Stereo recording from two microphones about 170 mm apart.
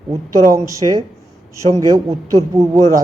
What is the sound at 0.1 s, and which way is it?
A man's voice, 20° right (ahead or behind).